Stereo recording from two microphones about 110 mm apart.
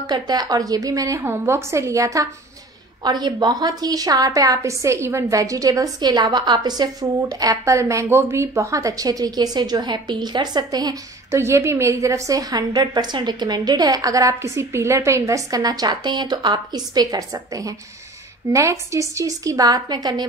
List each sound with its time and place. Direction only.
0.1 s a woman's voice: 40° right (ahead or behind)
3.0 s a woman's voice: 40° right (ahead or behind)